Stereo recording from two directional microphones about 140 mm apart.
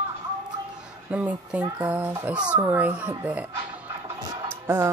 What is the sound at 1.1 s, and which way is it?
Speech, 10° right (ahead or behind).